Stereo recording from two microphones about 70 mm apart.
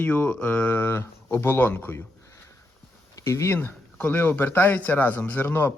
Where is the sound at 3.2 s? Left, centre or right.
Left.